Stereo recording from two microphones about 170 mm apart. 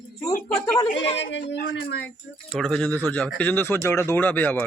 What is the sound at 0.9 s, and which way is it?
A woman's voice, 90° left.